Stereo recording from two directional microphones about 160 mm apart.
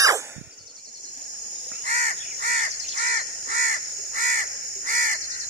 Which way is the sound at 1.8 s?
50° right (ahead or behind).